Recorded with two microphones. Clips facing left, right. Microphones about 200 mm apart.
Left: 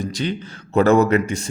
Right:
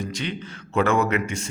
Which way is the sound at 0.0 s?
35° left (ahead or behind).